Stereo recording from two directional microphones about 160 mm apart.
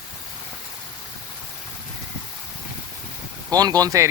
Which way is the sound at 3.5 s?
25° right (ahead or behind).